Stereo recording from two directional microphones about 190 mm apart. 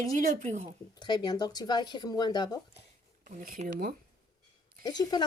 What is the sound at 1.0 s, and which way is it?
Speech, 20° left (ahead or behind).